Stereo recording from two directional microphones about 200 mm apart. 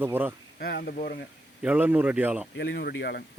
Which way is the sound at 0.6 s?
50° left (ahead or behind).